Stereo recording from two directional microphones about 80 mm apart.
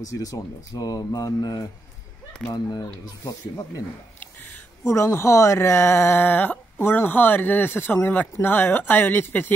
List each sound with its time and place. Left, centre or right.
0.1 s speech: left
2.5 s speech: left
4.2 s a sound: left
4.8 s speech: left